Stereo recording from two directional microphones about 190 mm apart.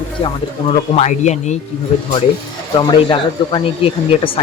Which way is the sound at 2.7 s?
25° left (ahead or behind).